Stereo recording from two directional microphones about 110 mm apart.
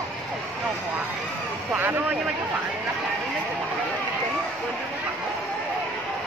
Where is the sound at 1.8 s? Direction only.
20° right (ahead or behind).